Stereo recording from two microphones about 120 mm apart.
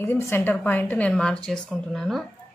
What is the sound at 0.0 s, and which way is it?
A woman's voice, 20° left (ahead or behind).